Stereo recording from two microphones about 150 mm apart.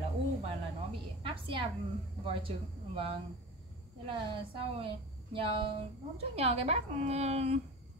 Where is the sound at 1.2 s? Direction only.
35° right (ahead or behind).